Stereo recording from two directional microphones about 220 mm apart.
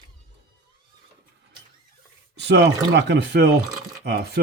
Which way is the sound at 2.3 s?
50° right (ahead or behind).